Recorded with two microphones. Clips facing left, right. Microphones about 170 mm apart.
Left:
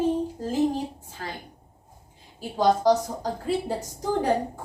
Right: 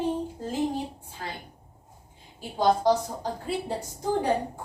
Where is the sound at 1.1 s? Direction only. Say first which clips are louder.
Even; 45° left (ahead or behind).